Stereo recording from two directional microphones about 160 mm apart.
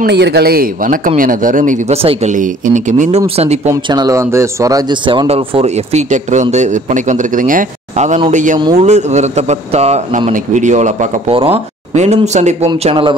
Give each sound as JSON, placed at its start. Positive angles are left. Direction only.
{"t": 0.0, "sound": "speech", "side_deg": -90}
{"t": 3.9, "sound": "speech", "side_deg": -20}
{"t": 12.8, "sound": "speech", "side_deg": -30}